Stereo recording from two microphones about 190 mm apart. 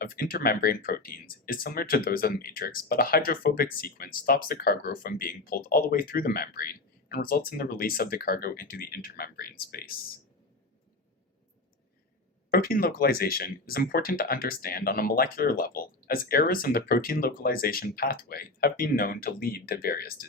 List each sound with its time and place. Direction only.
0.0 s speech: 50° left (ahead or behind)
12.5 s speech: 50° left (ahead or behind)